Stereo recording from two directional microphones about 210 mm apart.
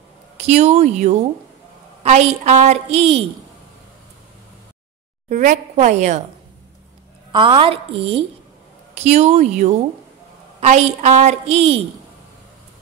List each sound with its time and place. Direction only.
0.4 s a woman's voice: 30° right (ahead or behind)
5.3 s a woman's voice: 35° right (ahead or behind)
7.3 s a woman's voice: 25° right (ahead or behind)